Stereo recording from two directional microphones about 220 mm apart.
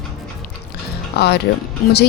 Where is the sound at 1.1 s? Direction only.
45° left (ahead or behind).